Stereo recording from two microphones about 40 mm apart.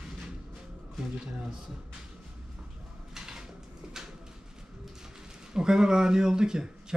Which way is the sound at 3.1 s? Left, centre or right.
Centre.